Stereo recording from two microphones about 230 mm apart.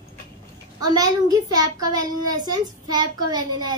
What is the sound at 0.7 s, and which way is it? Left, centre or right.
A child's voice, centre.